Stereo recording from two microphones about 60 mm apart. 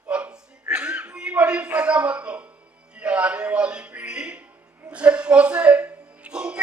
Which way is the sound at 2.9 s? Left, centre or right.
Centre.